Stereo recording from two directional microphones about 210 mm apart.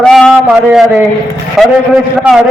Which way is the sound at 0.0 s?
Centre (ahead or behind).